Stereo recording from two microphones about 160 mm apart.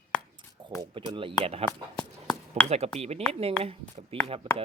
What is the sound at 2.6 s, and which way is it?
Speech, 40° right (ahead or behind).